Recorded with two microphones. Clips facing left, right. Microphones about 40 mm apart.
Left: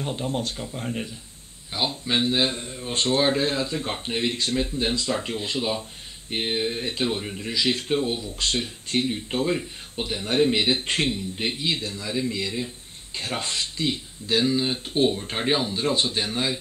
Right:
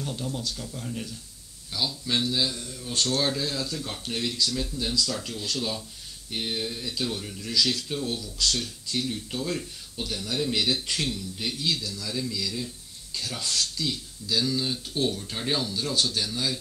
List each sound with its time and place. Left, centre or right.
0.0 s speech: left